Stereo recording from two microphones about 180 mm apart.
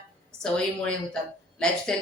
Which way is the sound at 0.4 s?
5° left (ahead or behind).